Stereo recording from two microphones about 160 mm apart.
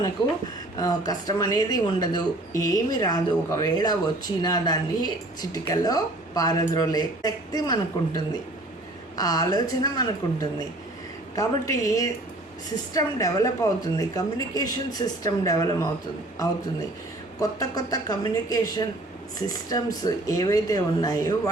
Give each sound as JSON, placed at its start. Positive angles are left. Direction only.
{"t": 0.8, "sound": "speech", "side_deg": 25}
{"t": 11.3, "sound": "speech", "side_deg": 20}
{"t": 17.4, "sound": "speech", "side_deg": 25}